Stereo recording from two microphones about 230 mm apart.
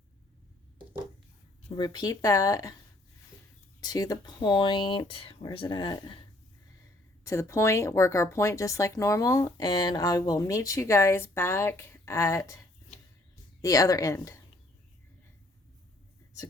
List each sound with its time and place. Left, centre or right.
1.7 s speech: centre
3.8 s speech: centre
7.3 s speech: centre